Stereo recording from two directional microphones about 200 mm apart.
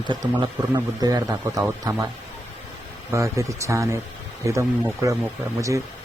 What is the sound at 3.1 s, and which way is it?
Speech, 15° right (ahead or behind).